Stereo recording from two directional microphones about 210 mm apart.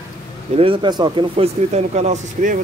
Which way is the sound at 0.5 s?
25° right (ahead or behind).